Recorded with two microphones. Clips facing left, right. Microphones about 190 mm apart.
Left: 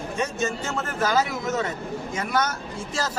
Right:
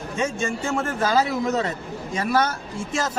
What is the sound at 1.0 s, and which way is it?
Speech, 30° right (ahead or behind).